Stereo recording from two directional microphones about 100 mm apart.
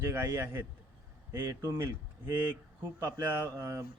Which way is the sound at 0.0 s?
25° right (ahead or behind).